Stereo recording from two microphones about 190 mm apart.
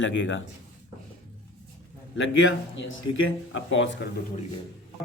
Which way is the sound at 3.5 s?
80° left.